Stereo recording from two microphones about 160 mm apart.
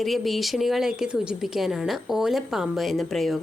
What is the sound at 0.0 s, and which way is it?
Speech, centre (ahead or behind).